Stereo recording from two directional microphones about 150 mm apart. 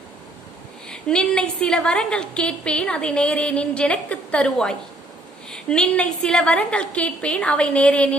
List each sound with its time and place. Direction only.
0.9 s a woman's voice: 5° left (ahead or behind)